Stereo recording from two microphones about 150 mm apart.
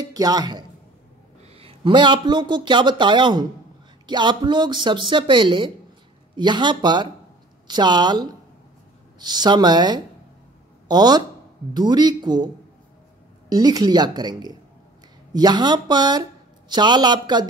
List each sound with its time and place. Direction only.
0.0 s speech: 25° right (ahead or behind)
1.5 s a woman's voice: 40° right (ahead or behind)
13.5 s a woman's voice: 25° right (ahead or behind)